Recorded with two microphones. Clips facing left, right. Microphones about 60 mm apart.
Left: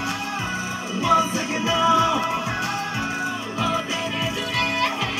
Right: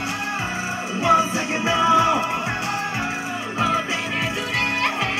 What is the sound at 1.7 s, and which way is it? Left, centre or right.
Music, right.